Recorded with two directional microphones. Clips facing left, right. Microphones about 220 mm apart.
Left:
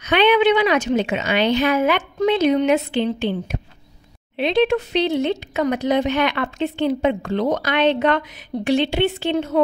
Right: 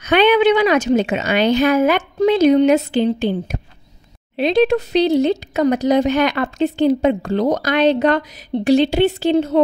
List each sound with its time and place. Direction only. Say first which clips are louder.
0.0 s speech: right 3 dB; 45° right (ahead or behind)